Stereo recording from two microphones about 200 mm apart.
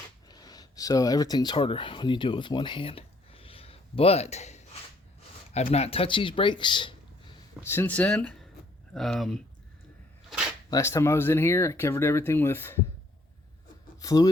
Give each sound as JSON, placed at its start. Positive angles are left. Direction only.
{"t": 0.3, "sound": "speech", "side_deg": 20}
{"t": 7.6, "sound": "speech", "side_deg": 10}
{"t": 10.2, "sound": "a sound", "side_deg": -5}
{"t": 10.7, "sound": "speech", "side_deg": 15}
{"t": 14.0, "sound": "speech", "side_deg": 20}